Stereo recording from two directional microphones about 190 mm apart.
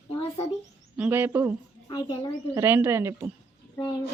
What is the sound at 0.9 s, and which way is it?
Speech, 10° right (ahead or behind).